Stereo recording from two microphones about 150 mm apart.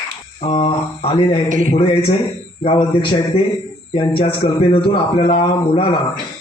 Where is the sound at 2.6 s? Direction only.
35° left (ahead or behind).